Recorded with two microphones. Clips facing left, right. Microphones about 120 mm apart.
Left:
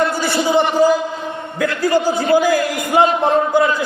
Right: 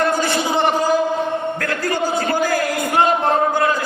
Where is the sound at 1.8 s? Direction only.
10° left (ahead or behind).